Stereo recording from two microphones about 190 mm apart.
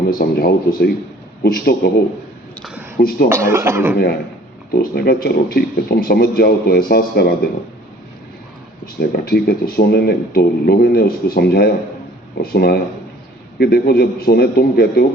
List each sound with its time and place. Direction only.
0.1 s a man's voice: 50° left (ahead or behind)
3.0 s a man's voice: 50° left (ahead or behind)
3.2 s speech: 15° right (ahead or behind)
4.7 s a man's voice: 50° left (ahead or behind)
9.0 s speech: 55° left (ahead or behind)